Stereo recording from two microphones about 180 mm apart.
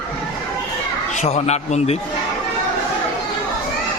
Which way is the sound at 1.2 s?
40° left (ahead or behind).